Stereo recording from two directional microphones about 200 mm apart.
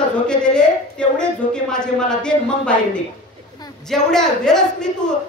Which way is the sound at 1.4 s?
40° left (ahead or behind).